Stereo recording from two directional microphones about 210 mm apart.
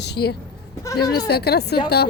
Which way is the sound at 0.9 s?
15° left (ahead or behind).